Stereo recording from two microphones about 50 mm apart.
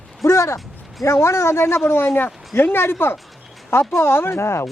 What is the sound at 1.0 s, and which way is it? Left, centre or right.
Speech, left.